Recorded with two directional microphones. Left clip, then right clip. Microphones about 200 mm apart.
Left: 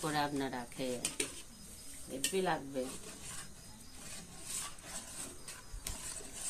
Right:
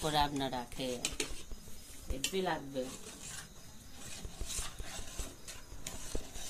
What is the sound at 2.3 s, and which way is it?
Speech, 5° left (ahead or behind).